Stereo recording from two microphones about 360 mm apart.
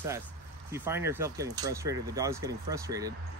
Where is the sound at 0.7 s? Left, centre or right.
Centre.